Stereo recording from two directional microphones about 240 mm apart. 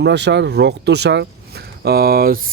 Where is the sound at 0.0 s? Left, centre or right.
Right.